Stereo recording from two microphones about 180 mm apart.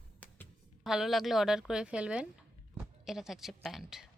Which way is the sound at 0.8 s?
Centre (ahead or behind).